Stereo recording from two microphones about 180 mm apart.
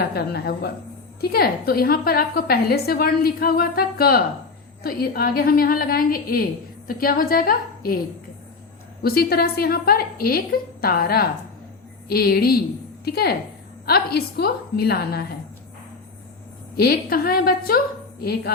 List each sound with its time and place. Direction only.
0.0 s a woman's voice: 60° left (ahead or behind)
9.0 s a woman's voice: 60° left (ahead or behind)
16.7 s a woman's voice: 55° left (ahead or behind)